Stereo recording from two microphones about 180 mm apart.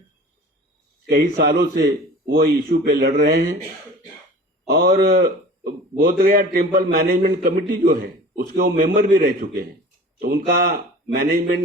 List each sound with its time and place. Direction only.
1.0 s a man's voice: 55° right (ahead or behind)
4.7 s a man's voice: 55° right (ahead or behind)